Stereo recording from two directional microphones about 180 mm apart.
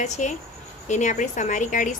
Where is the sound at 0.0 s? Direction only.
40° left (ahead or behind).